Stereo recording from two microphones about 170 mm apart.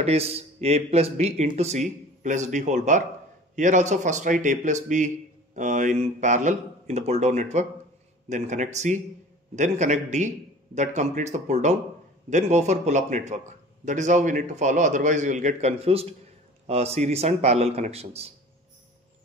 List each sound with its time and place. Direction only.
0.0 s a man's voice: 35° right (ahead or behind)